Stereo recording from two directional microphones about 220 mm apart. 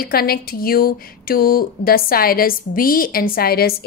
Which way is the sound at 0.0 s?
45° left (ahead or behind).